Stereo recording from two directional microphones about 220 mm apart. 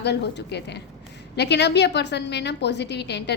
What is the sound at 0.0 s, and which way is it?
A woman's voice, 50° left (ahead or behind).